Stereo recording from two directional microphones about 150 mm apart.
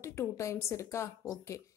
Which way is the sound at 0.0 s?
20° left (ahead or behind).